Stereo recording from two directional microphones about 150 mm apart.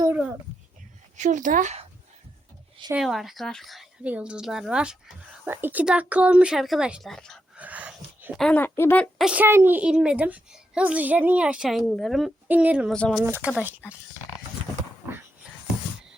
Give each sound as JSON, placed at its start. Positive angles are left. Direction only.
{"t": 1.1, "sound": "speech", "side_deg": -55}
{"t": 2.9, "sound": "a child's voice", "side_deg": 0}
{"t": 7.5, "sound": "dog", "side_deg": -10}
{"t": 8.4, "sound": "speech", "side_deg": 10}
{"t": 9.1, "sound": "a child's voice", "side_deg": -5}
{"t": 12.9, "sound": "speech", "side_deg": 5}
{"t": 13.1, "sound": "a child's voice", "side_deg": -15}